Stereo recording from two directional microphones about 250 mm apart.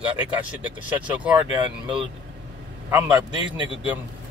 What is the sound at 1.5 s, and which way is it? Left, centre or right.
Speech, centre.